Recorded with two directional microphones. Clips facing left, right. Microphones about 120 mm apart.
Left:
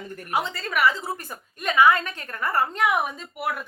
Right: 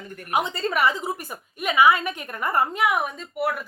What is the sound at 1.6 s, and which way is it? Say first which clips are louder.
A woman's voice: even; 10° right (ahead or behind).